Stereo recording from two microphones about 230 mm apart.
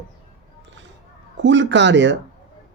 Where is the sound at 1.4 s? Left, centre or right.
Right.